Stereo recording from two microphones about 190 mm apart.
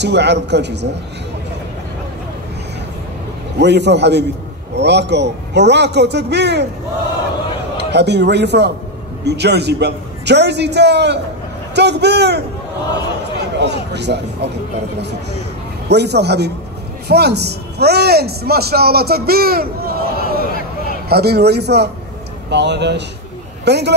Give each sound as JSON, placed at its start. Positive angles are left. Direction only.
{"t": 0.0, "sound": "a man's voice", "side_deg": -65}
{"t": 3.5, "sound": "a man's voice", "side_deg": -65}
{"t": 7.7, "sound": "a man's voice", "side_deg": -65}
{"t": 13.6, "sound": "a man's voice", "side_deg": -65}
{"t": 15.9, "sound": "a man's voice", "side_deg": -60}